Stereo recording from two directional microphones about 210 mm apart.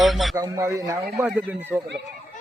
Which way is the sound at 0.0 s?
Centre (ahead or behind).